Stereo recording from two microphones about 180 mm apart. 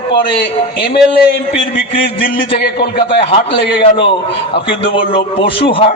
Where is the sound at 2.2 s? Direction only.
50° left (ahead or behind).